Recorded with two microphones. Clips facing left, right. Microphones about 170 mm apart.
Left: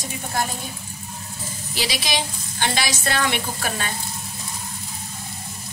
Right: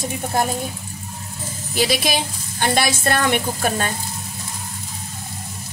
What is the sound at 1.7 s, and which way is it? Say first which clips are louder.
Speech: right 6 dB; 50° right (ahead or behind).